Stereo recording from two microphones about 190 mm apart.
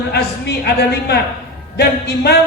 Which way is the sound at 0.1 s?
60° left (ahead or behind).